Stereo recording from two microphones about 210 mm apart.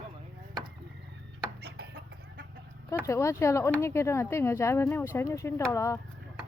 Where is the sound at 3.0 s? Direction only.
15° left (ahead or behind).